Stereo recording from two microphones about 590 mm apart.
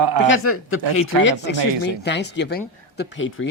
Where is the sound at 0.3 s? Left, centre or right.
Left.